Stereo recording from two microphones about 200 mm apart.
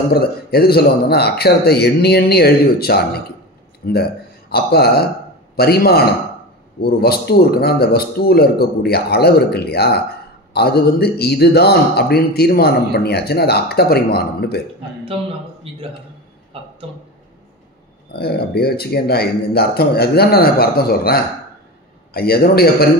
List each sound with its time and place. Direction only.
0.1 s a man's voice: 50° left (ahead or behind)
15.7 s a man's voice: 30° right (ahead or behind)
18.1 s a man's voice: 55° left (ahead or behind)